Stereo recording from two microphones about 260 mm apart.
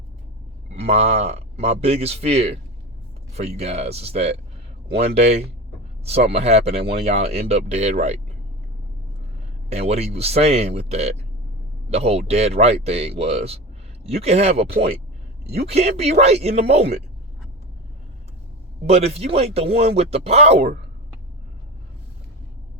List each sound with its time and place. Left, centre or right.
0.8 s speech: right
9.6 s speech: right
18.9 s speech: right